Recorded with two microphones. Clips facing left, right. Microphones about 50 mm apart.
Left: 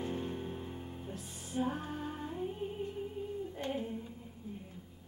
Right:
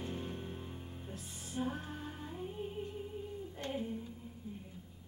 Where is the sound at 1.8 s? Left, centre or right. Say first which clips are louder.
Left 5 dB; centre.